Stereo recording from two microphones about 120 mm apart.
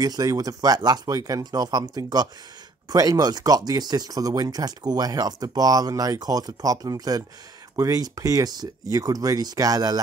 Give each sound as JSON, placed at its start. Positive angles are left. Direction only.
{"t": 0.0, "sound": "speech", "side_deg": -30}